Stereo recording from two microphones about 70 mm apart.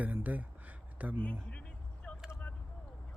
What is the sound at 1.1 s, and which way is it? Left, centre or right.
Speech, centre.